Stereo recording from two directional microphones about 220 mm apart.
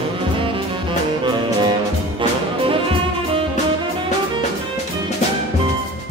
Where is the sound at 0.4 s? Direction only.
25° right (ahead or behind).